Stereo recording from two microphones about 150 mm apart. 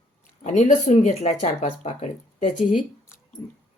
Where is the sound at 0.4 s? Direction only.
50° left (ahead or behind).